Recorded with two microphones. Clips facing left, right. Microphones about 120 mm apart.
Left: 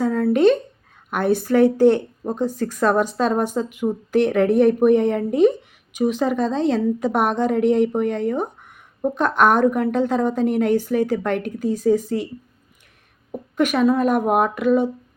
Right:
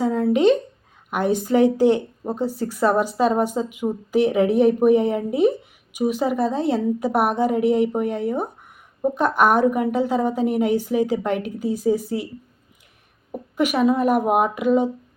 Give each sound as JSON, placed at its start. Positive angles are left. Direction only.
{"t": 0.0, "sound": "a sound", "side_deg": -20}
{"t": 1.1, "sound": "speech", "side_deg": -15}
{"t": 13.3, "sound": "speech", "side_deg": -10}